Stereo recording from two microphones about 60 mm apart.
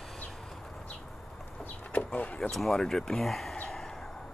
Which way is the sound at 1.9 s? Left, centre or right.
Left.